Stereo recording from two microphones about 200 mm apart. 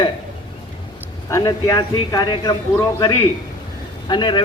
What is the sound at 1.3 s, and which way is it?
A man's voice, 20° left (ahead or behind).